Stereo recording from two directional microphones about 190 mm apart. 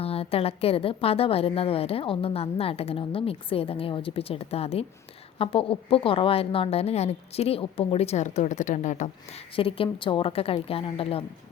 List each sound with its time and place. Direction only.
0.0 s a woman's voice: 30° left (ahead or behind)
9.6 s a woman's voice: 30° left (ahead or behind)